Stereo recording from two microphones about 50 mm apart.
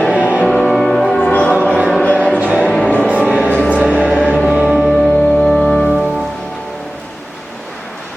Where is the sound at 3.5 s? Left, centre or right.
Left.